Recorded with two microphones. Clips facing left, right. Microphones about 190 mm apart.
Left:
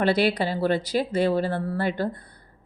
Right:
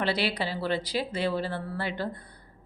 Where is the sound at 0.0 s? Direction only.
50° left (ahead or behind).